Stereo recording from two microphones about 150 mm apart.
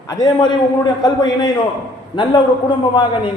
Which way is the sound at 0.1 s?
30° left (ahead or behind).